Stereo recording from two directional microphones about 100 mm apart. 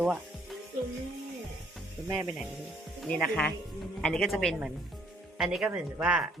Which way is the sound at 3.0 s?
10° left (ahead or behind).